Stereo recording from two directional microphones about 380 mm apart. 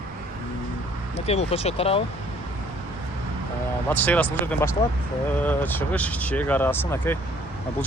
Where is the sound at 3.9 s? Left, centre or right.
Centre.